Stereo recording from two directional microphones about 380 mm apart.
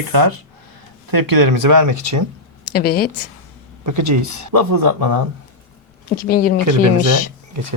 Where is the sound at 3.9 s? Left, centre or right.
Right.